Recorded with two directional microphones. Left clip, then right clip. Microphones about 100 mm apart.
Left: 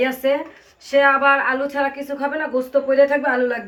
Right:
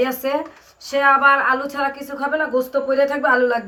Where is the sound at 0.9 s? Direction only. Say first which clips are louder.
Right 1 dB; 20° right (ahead or behind).